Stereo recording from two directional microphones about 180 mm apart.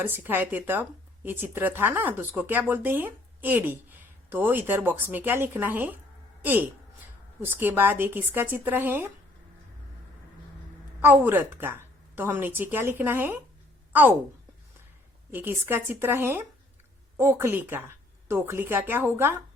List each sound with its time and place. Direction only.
0.0 s a woman's voice: 10° right (ahead or behind)
11.0 s a woman's voice: 10° right (ahead or behind)
15.3 s speech: 10° right (ahead or behind)